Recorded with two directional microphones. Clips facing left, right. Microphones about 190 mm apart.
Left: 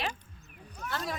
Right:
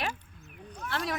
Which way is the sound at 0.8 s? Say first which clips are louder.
Right 1 dB; 10° left (ahead or behind).